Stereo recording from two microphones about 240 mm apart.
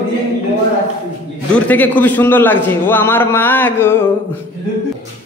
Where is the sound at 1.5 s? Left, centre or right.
Centre.